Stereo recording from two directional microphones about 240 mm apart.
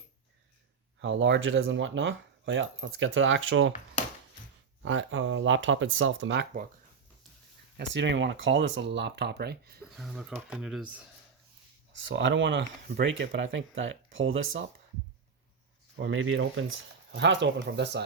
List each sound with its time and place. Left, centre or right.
1.0 s speech: right
4.8 s speech: right
7.8 s speech: right
9.8 s speech: centre
11.9 s speech: right
16.0 s speech: right